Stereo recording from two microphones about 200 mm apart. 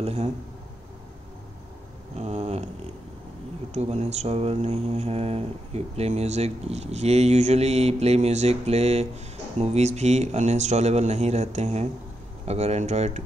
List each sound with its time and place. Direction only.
0.0 s mantra: 30° right (ahead or behind)
2.1 s a sound: 35° right (ahead or behind)
3.7 s mantra: 35° right (ahead or behind)